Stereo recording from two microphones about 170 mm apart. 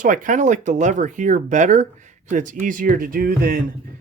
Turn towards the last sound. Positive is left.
turn(degrees=-55)  # may be behind; listen again after turning